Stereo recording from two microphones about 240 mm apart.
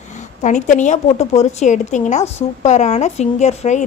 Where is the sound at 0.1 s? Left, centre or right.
Left.